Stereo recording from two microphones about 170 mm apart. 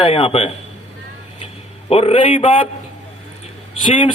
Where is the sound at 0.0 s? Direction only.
35° left (ahead or behind).